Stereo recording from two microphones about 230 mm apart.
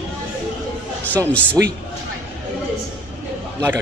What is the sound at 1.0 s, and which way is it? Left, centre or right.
Speech, centre.